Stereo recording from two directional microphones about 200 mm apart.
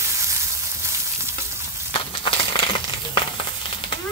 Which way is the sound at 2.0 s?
25° left (ahead or behind).